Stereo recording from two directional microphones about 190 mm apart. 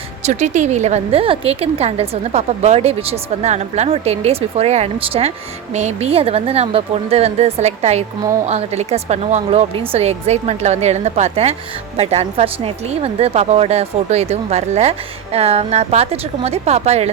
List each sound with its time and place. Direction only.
0.3 s a woman's voice: 40° right (ahead or behind)